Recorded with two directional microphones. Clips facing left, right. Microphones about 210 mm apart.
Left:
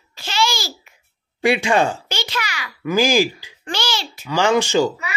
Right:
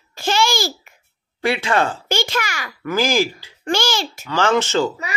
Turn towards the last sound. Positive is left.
turn(degrees=15)  # may be behind; listen again after turning